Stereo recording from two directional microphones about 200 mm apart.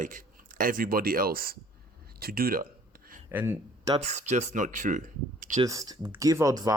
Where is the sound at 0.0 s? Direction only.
40° right (ahead or behind).